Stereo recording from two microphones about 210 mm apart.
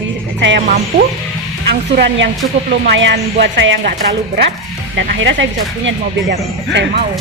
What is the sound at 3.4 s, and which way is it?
Speech, 60° right (ahead or behind).